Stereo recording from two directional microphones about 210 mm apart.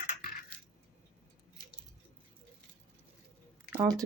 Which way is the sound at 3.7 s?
15° right (ahead or behind).